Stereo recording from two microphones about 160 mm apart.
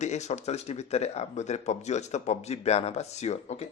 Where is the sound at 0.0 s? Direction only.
45° left (ahead or behind).